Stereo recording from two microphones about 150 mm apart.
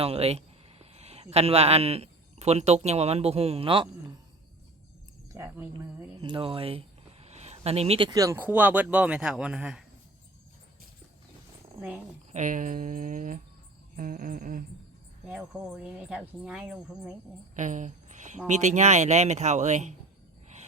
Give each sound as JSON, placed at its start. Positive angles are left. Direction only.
{"t": 0.0, "sound": "speech", "side_deg": -40}
{"t": 5.3, "sound": "speech", "side_deg": -20}
{"t": 6.2, "sound": "a sound", "side_deg": -35}
{"t": 8.1, "sound": "a man's voice", "side_deg": -20}
{"t": 12.3, "sound": "speech", "side_deg": -55}
{"t": 15.3, "sound": "speech", "side_deg": -5}
{"t": 17.5, "sound": "a sound", "side_deg": -55}
{"t": 18.4, "sound": "speech", "side_deg": -50}